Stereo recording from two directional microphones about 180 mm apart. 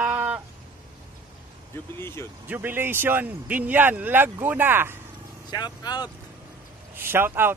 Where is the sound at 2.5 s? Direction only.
10° right (ahead or behind).